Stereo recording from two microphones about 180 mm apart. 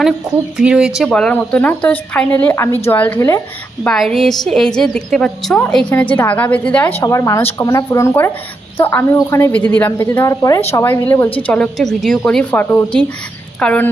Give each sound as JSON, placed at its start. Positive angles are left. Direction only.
{"t": 0.0, "sound": "a woman's voice", "side_deg": -5}
{"t": 3.8, "sound": "a woman's voice", "side_deg": 0}